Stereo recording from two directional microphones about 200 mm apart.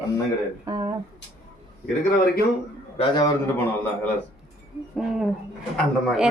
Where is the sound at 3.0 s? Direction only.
20° left (ahead or behind).